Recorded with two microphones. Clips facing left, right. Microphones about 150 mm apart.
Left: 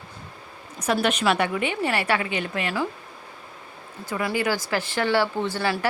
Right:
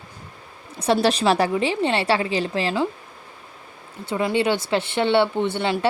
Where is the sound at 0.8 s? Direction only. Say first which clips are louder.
Right 4 dB; 30° right (ahead or behind).